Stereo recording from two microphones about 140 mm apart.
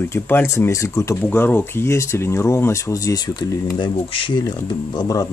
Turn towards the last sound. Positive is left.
turn(degrees=25)  # may be behind; listen again after turning